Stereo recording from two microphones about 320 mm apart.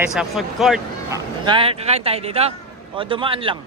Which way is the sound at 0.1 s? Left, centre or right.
Centre.